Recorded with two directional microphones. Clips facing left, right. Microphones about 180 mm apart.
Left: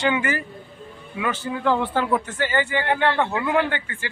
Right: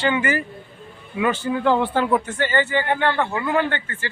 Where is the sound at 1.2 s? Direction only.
30° right (ahead or behind).